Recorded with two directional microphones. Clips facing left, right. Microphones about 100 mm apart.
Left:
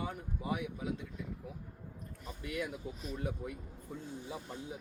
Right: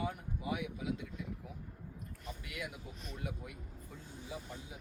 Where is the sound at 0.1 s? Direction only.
35° left (ahead or behind).